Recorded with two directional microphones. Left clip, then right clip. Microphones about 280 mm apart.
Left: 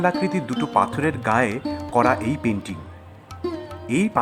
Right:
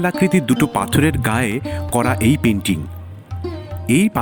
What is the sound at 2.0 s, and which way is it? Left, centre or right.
Speech, right.